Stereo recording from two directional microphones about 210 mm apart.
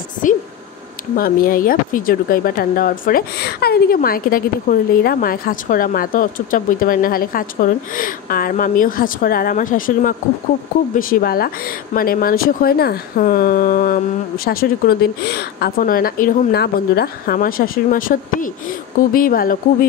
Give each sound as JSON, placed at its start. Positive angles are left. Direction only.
{"t": 0.2, "sound": "speech", "side_deg": 40}